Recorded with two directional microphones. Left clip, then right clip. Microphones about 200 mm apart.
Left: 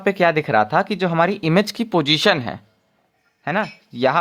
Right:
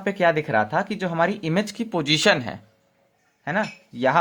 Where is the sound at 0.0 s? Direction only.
35° left (ahead or behind).